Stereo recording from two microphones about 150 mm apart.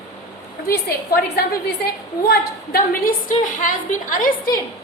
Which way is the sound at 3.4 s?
60° left (ahead or behind).